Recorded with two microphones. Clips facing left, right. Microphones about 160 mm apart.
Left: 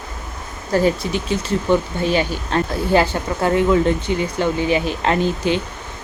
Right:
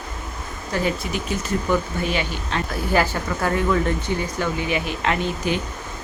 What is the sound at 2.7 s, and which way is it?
Speech, 25° left (ahead or behind).